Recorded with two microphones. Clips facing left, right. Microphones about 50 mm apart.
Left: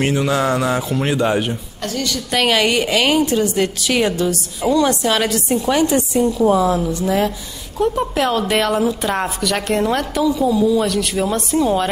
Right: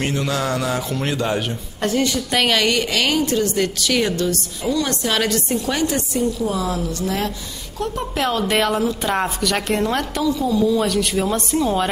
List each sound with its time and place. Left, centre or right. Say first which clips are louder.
0.0 s a woman's voice: left 5 dB; centre
2.3 s a woman's voice: left 3 dB; centre
2.6 s a woman's voice: left 3 dB; centre
6.2 s a woman's voice: left 8 dB; left; by 11.9 s centre